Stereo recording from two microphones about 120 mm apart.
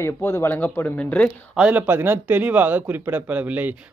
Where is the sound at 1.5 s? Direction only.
10° right (ahead or behind).